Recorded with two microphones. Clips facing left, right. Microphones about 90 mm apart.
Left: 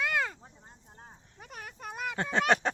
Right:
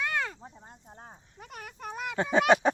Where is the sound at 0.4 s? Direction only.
25° right (ahead or behind).